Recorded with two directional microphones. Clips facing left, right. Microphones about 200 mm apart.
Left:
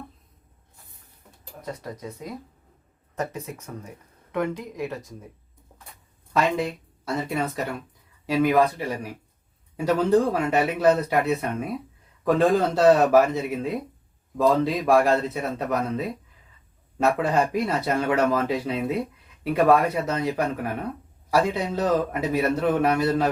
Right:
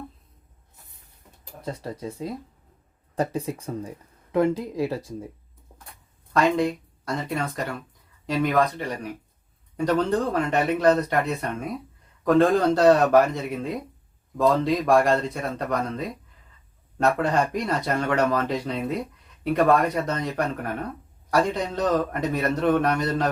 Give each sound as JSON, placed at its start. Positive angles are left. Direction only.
{"t": 1.6, "sound": "speech", "side_deg": -30}
{"t": 6.3, "sound": "a man's voice", "side_deg": 0}